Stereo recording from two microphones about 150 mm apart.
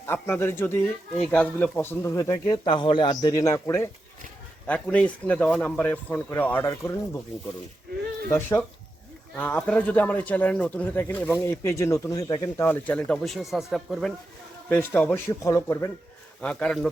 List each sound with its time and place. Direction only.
0.0 s speech: 15° left (ahead or behind)
4.6 s speech: 10° left (ahead or behind)
8.3 s speech: 15° left (ahead or behind); by 14.1 s centre (ahead or behind)
14.7 s speech: 15° left (ahead or behind)
16.4 s speech: 5° left (ahead or behind)